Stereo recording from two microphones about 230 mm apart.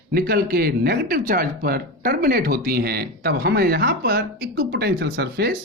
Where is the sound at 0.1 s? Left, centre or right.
Right.